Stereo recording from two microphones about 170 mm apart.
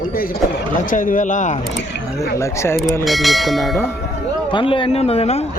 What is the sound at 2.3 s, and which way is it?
Speech, 15° left (ahead or behind).